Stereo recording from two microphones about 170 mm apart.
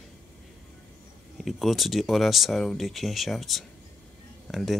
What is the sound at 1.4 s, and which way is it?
Speech, centre (ahead or behind).